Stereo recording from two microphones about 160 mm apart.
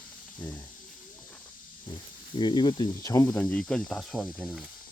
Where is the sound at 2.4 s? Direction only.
30° left (ahead or behind).